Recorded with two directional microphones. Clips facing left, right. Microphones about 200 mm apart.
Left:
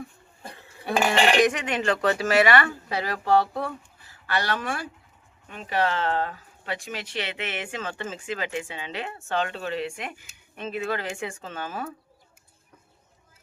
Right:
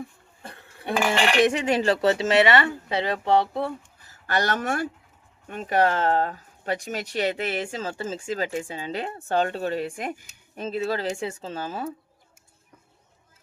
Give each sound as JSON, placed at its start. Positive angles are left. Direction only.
{"t": 0.9, "sound": "speech", "side_deg": 25}
{"t": 1.4, "sound": "speech", "side_deg": -30}
{"t": 4.0, "sound": "speech", "side_deg": -45}